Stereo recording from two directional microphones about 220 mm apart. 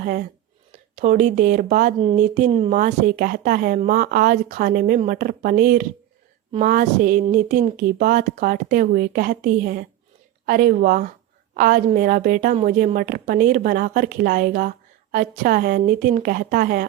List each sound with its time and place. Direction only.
0.0 s a woman's voice: 40° right (ahead or behind)